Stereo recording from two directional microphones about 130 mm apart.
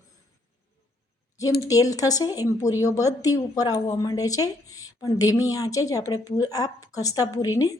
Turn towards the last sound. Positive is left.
turn(degrees=25)  # may be behind; listen again after turning